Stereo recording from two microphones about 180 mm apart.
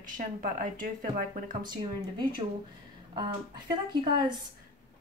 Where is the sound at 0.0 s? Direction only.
50° right (ahead or behind).